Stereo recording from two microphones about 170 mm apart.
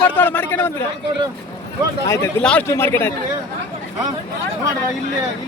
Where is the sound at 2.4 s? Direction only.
5° left (ahead or behind).